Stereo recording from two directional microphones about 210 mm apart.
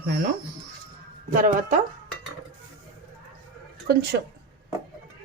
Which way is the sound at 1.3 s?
40° right (ahead or behind).